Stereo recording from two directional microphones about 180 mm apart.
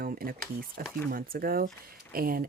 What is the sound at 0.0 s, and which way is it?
Speech, 55° right (ahead or behind).